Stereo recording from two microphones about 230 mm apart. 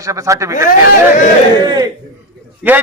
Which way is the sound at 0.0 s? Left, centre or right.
Centre.